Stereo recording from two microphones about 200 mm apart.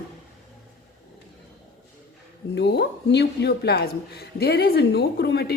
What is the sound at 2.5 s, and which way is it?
Speech, 55° left (ahead or behind).